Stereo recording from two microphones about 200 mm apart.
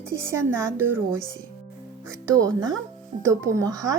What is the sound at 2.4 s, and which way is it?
Speech, 15° right (ahead or behind).